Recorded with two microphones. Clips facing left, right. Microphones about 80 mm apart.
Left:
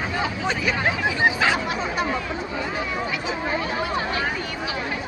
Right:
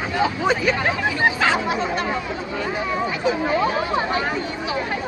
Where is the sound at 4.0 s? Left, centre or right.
Right.